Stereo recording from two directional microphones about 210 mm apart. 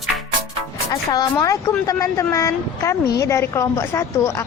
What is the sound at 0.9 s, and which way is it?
A woman's voice, 15° left (ahead or behind).